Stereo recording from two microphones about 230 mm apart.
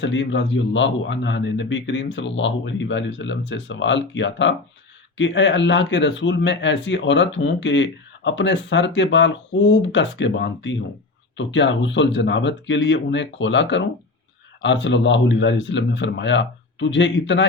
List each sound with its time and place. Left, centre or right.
0.0 s speech: left